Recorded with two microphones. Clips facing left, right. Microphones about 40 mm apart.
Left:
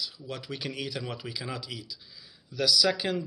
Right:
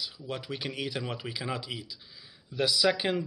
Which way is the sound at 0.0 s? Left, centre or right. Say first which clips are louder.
Right 1 dB; centre.